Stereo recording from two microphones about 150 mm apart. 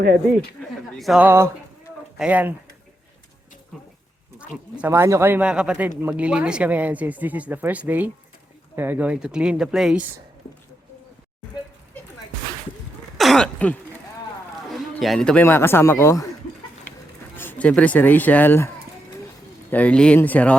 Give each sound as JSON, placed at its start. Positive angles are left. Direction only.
{"t": 0.9, "sound": "speech", "side_deg": 0}
{"t": 1.2, "sound": "speech", "side_deg": -15}
{"t": 4.4, "sound": "speech", "side_deg": -10}
{"t": 13.1, "sound": "throat clearing", "side_deg": 0}
{"t": 14.7, "sound": "a man's voice", "side_deg": 0}
{"t": 17.3, "sound": "speech", "side_deg": 10}
{"t": 19.7, "sound": "speech", "side_deg": 10}